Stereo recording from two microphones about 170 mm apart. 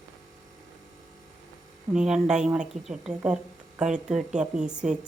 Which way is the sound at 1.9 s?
5° right (ahead or behind).